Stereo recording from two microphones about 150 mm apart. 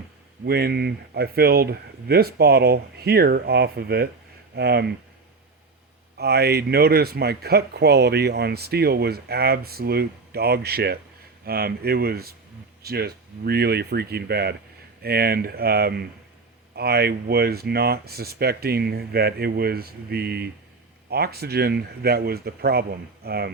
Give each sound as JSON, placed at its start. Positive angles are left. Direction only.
{"t": 0.4, "sound": "speech", "side_deg": -90}
{"t": 6.1, "sound": "speech", "side_deg": -90}